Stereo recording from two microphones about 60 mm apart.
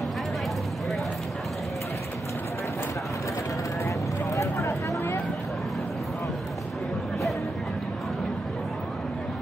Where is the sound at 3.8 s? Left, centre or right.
Left.